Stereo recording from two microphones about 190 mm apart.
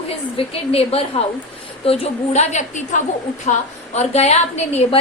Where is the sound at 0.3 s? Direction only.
30° left (ahead or behind).